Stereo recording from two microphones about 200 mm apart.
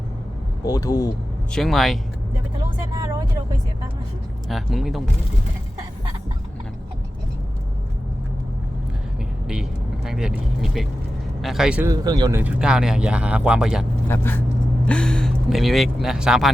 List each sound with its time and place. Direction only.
0.6 s speech: 15° left (ahead or behind)
1.5 s speech: centre (ahead or behind)
4.4 s speech: centre (ahead or behind)
9.5 s speech: 5° right (ahead or behind)
11.9 s speech: 20° right (ahead or behind)
12.4 s speech: 5° right (ahead or behind)
14.1 s speech: 10° left (ahead or behind)